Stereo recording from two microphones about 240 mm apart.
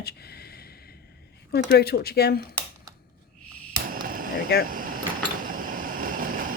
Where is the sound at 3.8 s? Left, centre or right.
Right.